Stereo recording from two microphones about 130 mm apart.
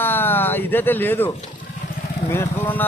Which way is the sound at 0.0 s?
15° left (ahead or behind).